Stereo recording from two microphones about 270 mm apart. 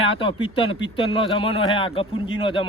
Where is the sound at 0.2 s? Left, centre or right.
Centre.